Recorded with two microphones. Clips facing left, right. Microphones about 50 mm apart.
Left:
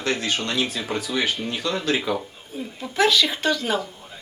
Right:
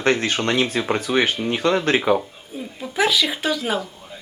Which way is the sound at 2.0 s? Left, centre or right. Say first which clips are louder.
Right 6 dB; right.